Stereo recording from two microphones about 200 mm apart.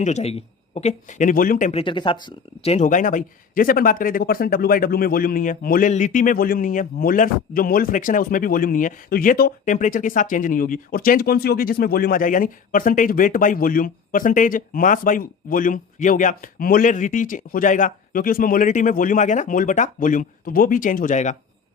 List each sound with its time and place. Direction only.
0.0 s speech: 35° left (ahead or behind)
1.8 s speech: 25° left (ahead or behind)